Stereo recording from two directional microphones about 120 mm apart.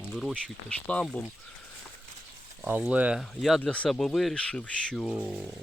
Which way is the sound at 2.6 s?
10° right (ahead or behind).